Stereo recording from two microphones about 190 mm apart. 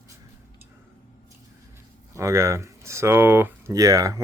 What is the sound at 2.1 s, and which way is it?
Speech, 15° right (ahead or behind).